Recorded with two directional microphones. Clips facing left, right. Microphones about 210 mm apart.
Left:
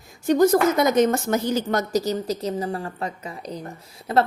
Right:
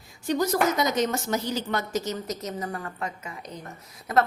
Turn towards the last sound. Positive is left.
turn(degrees=30)  # may be behind; listen again after turning